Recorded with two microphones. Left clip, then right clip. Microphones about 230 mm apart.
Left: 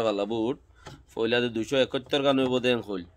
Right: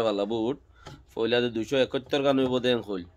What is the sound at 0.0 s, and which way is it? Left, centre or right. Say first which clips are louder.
A man's voice: even; centre.